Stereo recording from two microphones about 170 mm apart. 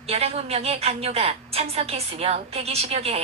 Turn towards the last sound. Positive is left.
turn(degrees=-35)  # may be behind; listen again after turning